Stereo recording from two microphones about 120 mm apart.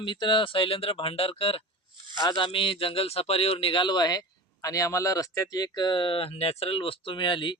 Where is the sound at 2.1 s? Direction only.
35° left (ahead or behind).